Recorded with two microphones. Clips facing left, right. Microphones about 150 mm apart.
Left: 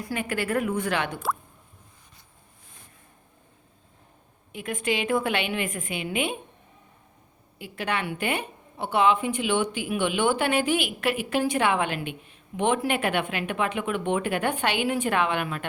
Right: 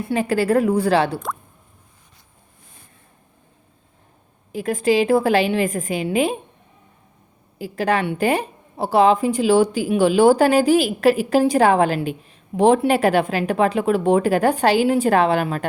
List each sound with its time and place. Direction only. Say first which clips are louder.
0.0 s a woman's voice: right 9 dB; 30° right (ahead or behind)
4.5 s a woman's voice: right 10 dB; 35° right (ahead or behind)
7.6 s a woman's voice: right 9 dB; 35° right (ahead or behind)